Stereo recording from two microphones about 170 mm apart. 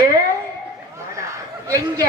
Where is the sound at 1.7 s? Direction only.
20° right (ahead or behind).